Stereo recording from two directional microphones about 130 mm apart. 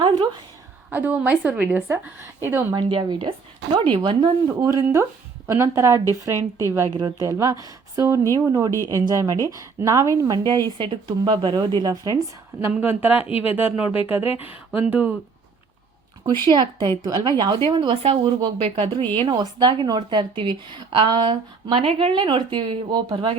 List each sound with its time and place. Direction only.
0.9 s a woman's voice: 15° right (ahead or behind)
2.7 s a woman's voice: 35° right (ahead or behind)
12.7 s a woman's voice: 15° right (ahead or behind)
16.2 s speech: 35° right (ahead or behind)
19.2 s speech: 35° right (ahead or behind)